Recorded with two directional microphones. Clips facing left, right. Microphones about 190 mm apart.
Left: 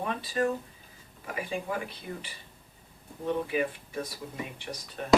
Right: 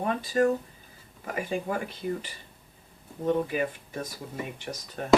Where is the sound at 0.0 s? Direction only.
45° right (ahead or behind).